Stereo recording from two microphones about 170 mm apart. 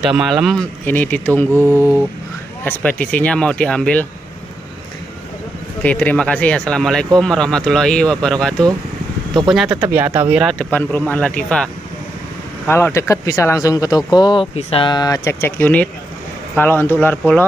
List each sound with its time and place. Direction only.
0.1 s speech: 5° right (ahead or behind)
2.6 s speech: 10° left (ahead or behind)
5.8 s speech: 10° left (ahead or behind); by 10.4 s 10° right (ahead or behind)
10.4 s speech: 5° left (ahead or behind)